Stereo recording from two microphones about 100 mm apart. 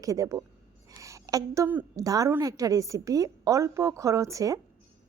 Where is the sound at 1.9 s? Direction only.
35° right (ahead or behind).